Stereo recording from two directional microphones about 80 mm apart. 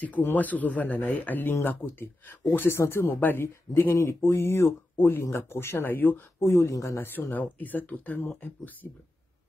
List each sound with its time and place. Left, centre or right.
0.0 s speech: left
7.1 s speech: left